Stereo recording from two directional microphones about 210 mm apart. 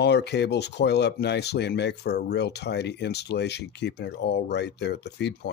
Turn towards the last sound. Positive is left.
turn(degrees=55)  # may be behind; listen again after turning